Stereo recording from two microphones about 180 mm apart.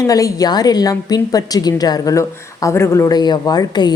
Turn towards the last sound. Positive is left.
turn(degrees=25)  # may be behind; listen again after turning